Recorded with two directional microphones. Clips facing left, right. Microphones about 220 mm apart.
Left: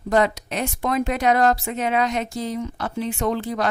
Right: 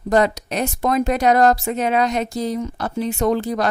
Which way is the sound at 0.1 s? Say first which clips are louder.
Right 3 dB; 40° right (ahead or behind).